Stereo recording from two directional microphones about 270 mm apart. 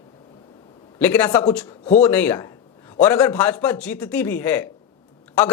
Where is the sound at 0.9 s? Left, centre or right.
Centre.